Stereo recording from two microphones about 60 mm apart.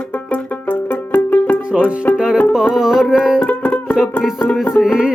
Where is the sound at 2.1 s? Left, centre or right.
Centre.